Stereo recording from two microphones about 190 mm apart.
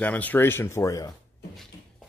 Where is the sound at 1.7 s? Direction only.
20° left (ahead or behind).